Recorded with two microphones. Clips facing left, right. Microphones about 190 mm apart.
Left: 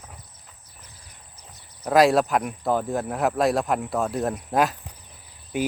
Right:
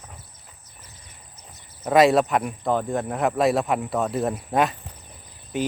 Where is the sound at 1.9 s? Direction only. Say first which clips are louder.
Right 1 dB; centre (ahead or behind).